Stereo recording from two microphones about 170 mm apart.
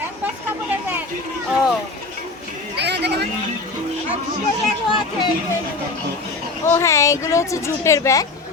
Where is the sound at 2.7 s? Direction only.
80° right.